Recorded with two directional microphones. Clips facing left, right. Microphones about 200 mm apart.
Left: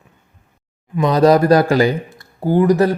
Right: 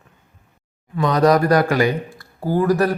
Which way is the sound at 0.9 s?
25° left (ahead or behind).